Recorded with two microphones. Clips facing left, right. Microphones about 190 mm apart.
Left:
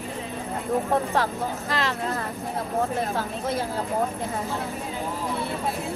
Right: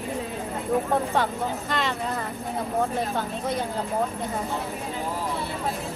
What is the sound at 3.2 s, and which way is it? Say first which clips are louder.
Speech: even; centre (ahead or behind).